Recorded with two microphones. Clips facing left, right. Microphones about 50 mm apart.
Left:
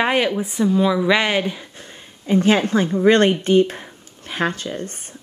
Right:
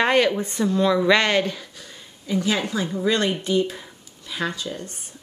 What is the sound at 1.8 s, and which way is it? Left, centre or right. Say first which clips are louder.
Speech: left 4 dB; left.